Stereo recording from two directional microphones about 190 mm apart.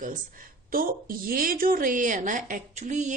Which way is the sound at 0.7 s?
50° right (ahead or behind).